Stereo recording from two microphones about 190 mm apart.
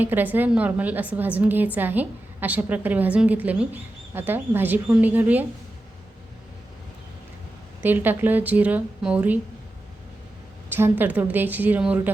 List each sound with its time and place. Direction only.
0.0 s a woman's voice: 10° right (ahead or behind)
7.8 s a woman's voice: 10° right (ahead or behind)
10.7 s a woman's voice: 10° right (ahead or behind)